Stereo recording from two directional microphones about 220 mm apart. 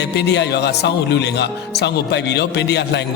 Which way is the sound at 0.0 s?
50° left (ahead or behind).